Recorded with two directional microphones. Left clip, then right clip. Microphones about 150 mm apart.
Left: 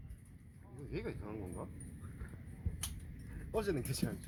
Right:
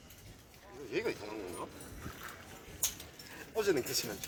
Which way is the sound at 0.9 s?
20° left (ahead or behind).